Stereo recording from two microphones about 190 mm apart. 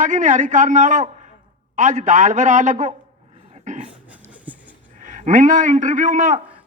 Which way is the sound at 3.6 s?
40° right (ahead or behind).